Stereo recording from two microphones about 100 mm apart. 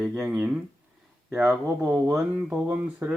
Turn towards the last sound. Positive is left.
turn(degrees=-15)  # may be behind; listen again after turning